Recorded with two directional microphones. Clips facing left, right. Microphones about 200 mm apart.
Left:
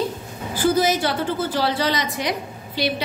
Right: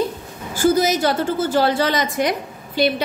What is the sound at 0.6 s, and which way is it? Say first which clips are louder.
A woman's voice: right 2 dB; 45° right (ahead or behind).